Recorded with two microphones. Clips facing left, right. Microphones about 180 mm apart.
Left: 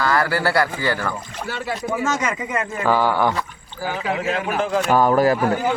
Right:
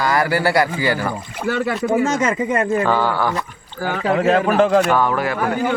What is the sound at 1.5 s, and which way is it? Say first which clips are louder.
Speech: right 10 dB; 55° right (ahead or behind).